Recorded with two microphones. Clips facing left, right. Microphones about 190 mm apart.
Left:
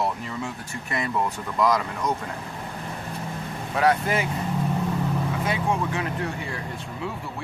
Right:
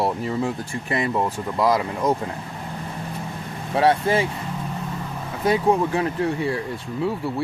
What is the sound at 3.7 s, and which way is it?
Speech, 30° right (ahead or behind).